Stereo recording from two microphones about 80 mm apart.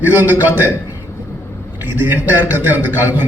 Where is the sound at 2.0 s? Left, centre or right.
Right.